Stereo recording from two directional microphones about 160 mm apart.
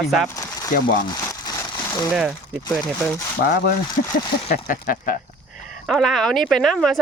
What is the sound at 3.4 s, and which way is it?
Speech, 65° left (ahead or behind).